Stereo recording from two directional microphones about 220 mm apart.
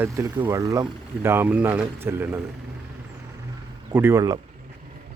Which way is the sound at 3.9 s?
10° right (ahead or behind).